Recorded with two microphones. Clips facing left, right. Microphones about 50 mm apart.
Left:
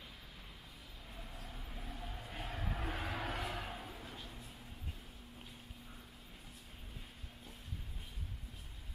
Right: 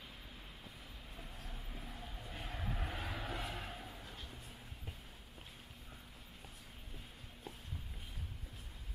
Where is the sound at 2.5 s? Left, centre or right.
Centre.